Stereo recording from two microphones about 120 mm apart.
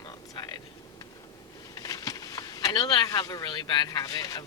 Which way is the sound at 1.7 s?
30° left (ahead or behind).